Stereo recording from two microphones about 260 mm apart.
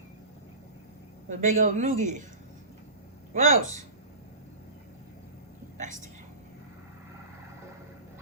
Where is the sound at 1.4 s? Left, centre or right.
Right.